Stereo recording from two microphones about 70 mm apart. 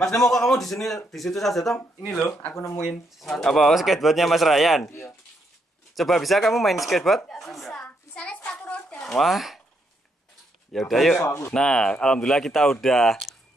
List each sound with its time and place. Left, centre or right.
0.0 s speech: centre
2.5 s speech: left
2.8 s speech: centre
5.9 s a woman's voice: centre
8.5 s a sound: left
9.2 s speech: centre
10.7 s speech: centre